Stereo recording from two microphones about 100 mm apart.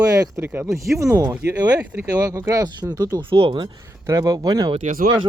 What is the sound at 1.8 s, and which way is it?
Speech, 15° right (ahead or behind).